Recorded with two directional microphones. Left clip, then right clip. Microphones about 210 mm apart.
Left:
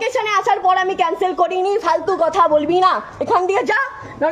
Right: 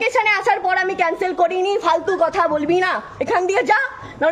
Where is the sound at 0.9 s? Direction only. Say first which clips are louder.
Left 1 dB; 15° right (ahead or behind).